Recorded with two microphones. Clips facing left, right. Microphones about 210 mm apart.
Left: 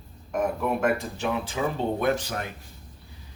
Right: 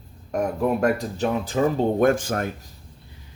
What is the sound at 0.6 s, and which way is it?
Speech, 40° right (ahead or behind).